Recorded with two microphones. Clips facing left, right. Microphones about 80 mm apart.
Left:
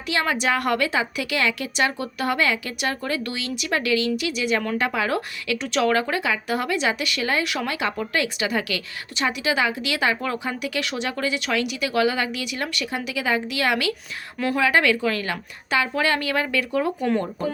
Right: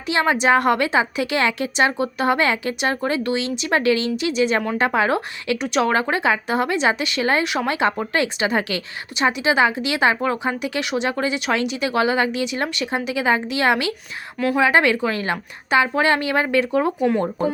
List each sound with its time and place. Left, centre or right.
0.1 s speech: right
14.3 s speech: centre
14.6 s speech: right